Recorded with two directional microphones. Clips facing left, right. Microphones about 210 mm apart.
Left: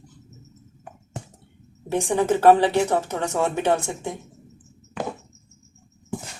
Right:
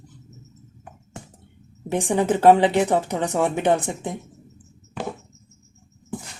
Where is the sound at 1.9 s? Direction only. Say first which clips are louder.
Even; 15° right (ahead or behind).